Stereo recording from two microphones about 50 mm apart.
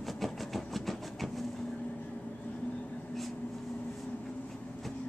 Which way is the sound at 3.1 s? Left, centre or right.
Centre.